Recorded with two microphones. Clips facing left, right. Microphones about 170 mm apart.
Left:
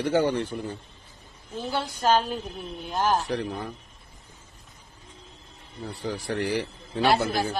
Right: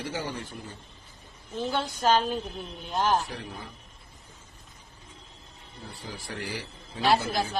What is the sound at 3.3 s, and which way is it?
Speech, 65° left (ahead or behind).